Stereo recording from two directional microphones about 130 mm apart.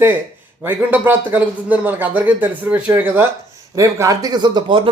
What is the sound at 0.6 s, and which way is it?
A man's voice, 15° right (ahead or behind).